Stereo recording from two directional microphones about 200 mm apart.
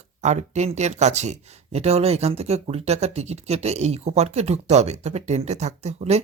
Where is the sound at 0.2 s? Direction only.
35° right (ahead or behind).